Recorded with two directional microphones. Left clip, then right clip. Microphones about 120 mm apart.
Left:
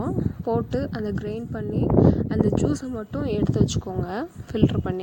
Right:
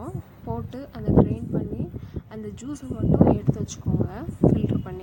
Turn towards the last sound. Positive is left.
turn(degrees=60)  # may be behind; listen again after turning